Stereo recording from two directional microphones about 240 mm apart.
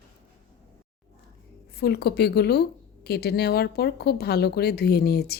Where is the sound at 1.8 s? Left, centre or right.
Left.